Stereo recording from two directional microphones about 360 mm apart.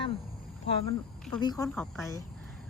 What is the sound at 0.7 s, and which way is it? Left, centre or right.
Speech, left.